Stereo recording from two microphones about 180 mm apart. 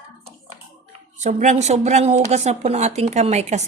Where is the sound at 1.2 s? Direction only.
40° right (ahead or behind).